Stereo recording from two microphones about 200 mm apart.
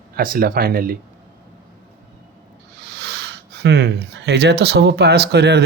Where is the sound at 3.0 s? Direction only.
55° right (ahead or behind).